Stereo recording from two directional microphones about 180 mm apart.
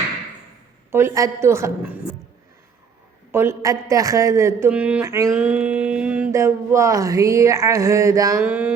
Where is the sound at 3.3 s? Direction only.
15° right (ahead or behind).